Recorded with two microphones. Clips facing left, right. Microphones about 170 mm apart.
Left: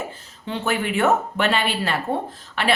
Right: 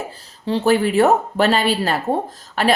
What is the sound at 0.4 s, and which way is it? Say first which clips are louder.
Speech: right 8 dB; 35° right (ahead or behind).